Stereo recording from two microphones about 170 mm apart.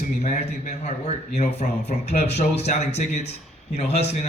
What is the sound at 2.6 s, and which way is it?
Speech, 40° left (ahead or behind).